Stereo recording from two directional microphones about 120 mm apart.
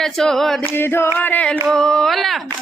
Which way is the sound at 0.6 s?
20° left (ahead or behind).